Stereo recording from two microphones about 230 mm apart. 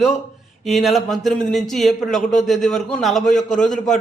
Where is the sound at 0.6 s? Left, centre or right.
Centre.